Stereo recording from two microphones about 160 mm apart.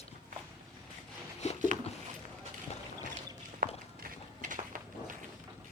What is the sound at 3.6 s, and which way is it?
Walk, 60° right (ahead or behind).